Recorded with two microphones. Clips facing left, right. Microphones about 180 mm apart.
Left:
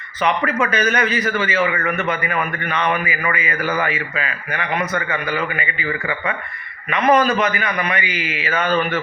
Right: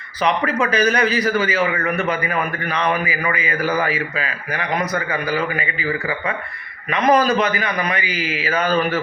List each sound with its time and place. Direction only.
0.2 s a man's voice: 35° right (ahead or behind)
6.9 s a man's voice: 35° right (ahead or behind)